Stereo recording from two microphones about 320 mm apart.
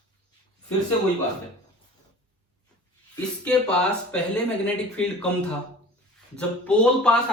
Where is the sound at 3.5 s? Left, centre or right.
Centre.